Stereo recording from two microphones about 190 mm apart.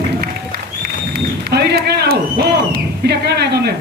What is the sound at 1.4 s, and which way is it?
Speech, 60° right (ahead or behind).